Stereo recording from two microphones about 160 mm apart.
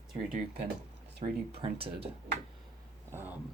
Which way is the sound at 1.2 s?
45° right (ahead or behind).